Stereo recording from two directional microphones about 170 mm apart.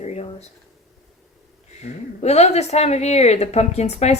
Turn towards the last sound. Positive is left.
turn(degrees=40)  # may be behind; listen again after turning